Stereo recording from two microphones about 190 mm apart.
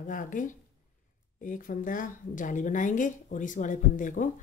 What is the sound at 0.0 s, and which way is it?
A woman's voice, 45° left (ahead or behind).